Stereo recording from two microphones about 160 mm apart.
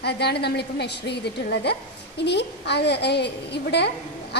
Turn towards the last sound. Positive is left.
turn(degrees=90)